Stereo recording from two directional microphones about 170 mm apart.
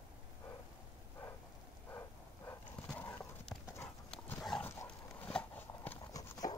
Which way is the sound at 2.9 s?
5° left (ahead or behind).